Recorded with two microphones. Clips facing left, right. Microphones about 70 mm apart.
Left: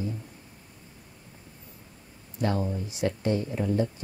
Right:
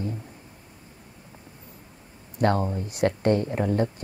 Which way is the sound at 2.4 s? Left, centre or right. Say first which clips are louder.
Right 5 dB; right.